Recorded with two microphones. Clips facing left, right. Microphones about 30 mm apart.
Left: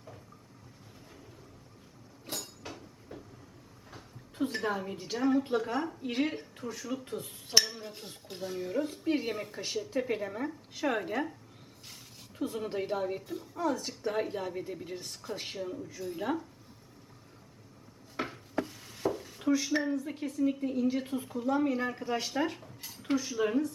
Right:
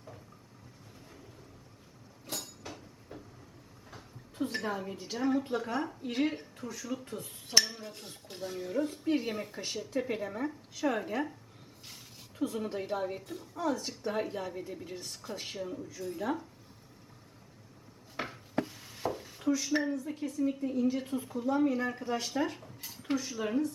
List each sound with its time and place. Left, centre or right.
2.3 s a sound: centre
4.7 s a woman's voice: centre
10.8 s a woman's voice: centre
12.4 s speech: centre
16.1 s a woman's voice: centre
18.2 s wood: centre
19.5 s a woman's voice: centre